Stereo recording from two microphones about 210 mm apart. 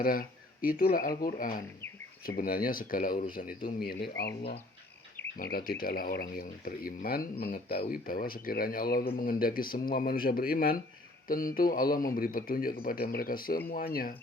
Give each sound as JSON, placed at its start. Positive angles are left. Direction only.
{"t": 0.0, "sound": "speech", "side_deg": 45}
{"t": 5.4, "sound": "speech", "side_deg": 45}